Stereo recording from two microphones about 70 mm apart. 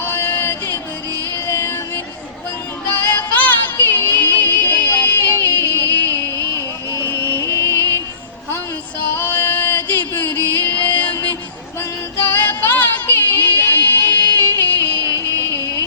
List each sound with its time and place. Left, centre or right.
0.0 s music: left
2.9 s music: left
5.4 s music: left
5.9 s music: left
6.1 s a sound: left
6.5 s music: left
9.1 s music: left
12.3 s music: left